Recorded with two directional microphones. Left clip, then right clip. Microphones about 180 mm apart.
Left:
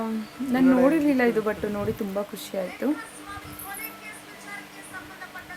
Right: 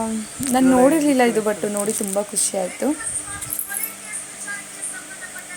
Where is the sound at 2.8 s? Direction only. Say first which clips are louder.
Right 4 dB; 15° right (ahead or behind).